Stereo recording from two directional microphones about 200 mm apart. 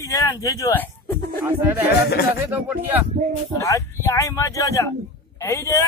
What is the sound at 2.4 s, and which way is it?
Speech, 10° right (ahead or behind).